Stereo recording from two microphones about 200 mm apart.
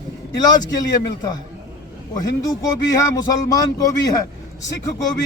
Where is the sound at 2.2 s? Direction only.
20° left (ahead or behind).